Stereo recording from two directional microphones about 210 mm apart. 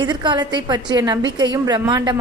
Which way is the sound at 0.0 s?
20° right (ahead or behind).